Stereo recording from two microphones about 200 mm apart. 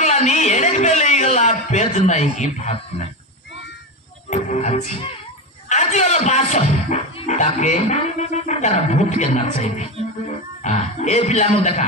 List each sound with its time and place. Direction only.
0.0 s a sound: 35° left (ahead or behind)
4.3 s music: 35° left (ahead or behind)
5.7 s speech: 35° left (ahead or behind)